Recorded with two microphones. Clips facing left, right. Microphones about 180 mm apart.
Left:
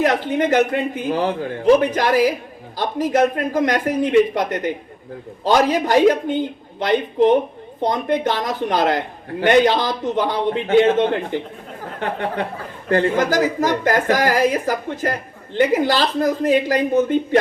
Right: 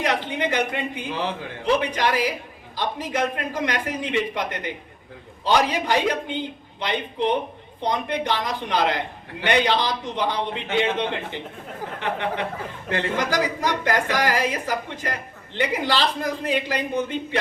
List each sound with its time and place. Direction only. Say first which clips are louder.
0.0 s a man's voice: left 6 dB; 45° left (ahead or behind)
12.9 s a man's voice: left 7 dB; 45° left (ahead or behind)